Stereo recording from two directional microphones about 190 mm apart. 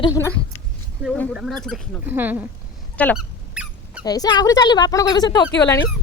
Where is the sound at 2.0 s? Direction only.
10° right (ahead or behind).